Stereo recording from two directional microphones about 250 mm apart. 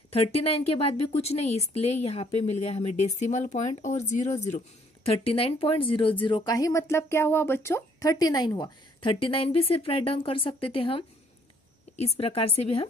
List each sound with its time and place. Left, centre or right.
0.1 s speech: left